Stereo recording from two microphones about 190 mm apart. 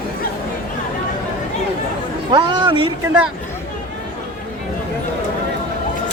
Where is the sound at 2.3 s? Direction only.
25° right (ahead or behind).